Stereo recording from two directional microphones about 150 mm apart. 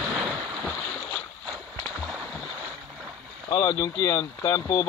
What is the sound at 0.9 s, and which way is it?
Boat, 10° left (ahead or behind).